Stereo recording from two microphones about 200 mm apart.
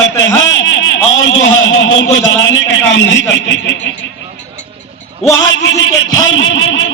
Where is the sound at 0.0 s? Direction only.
70° left (ahead or behind).